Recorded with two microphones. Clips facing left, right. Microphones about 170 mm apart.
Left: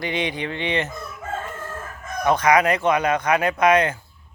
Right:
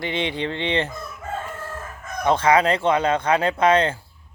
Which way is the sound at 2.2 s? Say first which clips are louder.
Even; 25° right (ahead or behind).